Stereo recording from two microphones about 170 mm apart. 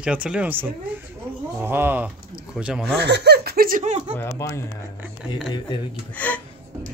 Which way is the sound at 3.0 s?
85° right.